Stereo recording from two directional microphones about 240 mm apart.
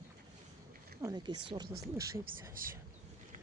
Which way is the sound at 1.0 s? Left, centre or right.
Centre.